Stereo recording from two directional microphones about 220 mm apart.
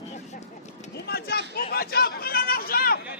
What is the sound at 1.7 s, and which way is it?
Chatter, 45° left (ahead or behind).